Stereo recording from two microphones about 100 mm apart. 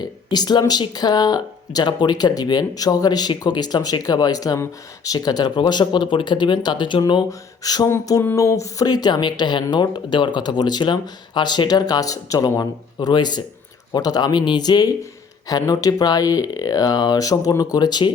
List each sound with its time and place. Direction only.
0.0 s speech: 45° left (ahead or behind)
7.3 s speech: 40° left (ahead or behind)